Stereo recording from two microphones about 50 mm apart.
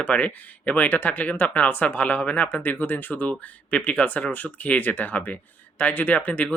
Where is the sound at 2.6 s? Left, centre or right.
Left.